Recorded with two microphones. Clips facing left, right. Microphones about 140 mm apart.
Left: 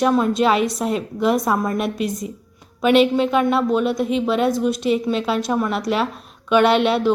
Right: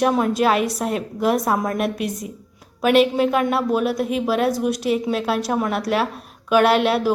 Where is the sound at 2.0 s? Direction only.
65° right (ahead or behind).